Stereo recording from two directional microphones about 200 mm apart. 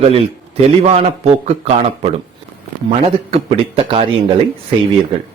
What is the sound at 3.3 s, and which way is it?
Speech, 30° right (ahead or behind).